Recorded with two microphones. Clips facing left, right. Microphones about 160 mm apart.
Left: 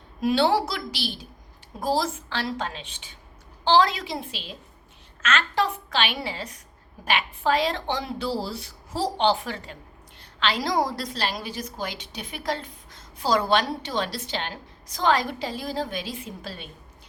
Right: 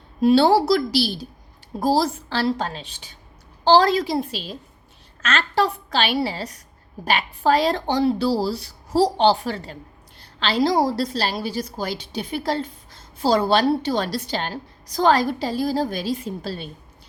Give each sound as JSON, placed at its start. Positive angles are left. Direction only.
{"t": 0.2, "sound": "a woman's voice", "side_deg": -35}